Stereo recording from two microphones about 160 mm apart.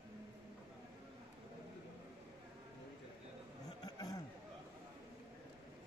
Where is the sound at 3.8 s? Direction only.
25° left (ahead or behind).